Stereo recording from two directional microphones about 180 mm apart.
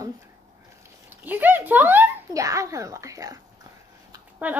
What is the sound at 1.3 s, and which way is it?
A woman's voice, 10° right (ahead or behind).